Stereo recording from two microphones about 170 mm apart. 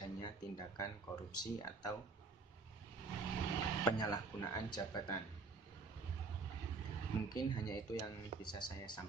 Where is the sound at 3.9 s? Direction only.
25° left (ahead or behind).